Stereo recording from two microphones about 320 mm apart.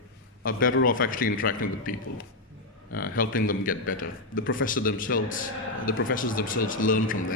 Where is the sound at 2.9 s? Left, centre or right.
Left.